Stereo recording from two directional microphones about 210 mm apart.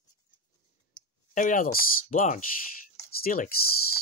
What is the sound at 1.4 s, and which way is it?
Speech, 40° left (ahead or behind).